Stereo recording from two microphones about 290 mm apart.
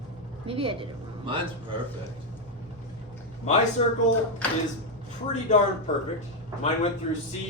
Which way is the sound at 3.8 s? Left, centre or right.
Left.